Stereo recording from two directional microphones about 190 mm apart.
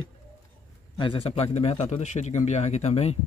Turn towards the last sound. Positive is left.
turn(degrees=35)  # may be behind; listen again after turning